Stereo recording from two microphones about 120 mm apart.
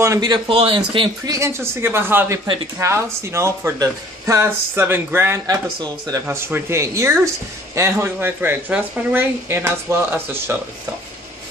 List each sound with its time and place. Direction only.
0.0 s speech: 25° right (ahead or behind)
0.5 s speech: 45° right (ahead or behind)
1.2 s speech: 25° right (ahead or behind)